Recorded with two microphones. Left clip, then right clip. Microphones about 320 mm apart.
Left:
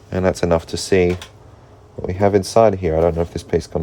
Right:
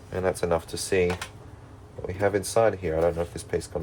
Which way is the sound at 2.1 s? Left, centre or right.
Left.